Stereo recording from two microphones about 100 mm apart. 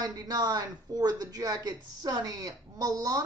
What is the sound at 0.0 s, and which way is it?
A man's voice, 40° right (ahead or behind).